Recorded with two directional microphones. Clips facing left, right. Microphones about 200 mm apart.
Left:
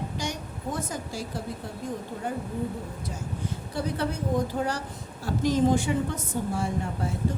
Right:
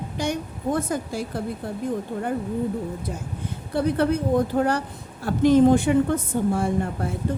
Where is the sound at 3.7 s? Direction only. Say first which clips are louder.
Right 9 dB; 55° right (ahead or behind).